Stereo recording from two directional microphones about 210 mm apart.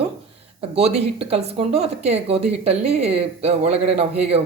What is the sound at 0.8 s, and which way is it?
Speech, 30° right (ahead or behind).